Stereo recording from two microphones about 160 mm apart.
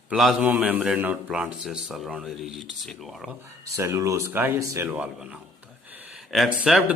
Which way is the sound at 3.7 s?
20° right (ahead or behind).